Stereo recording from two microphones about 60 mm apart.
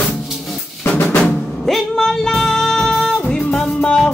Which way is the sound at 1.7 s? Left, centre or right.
Centre.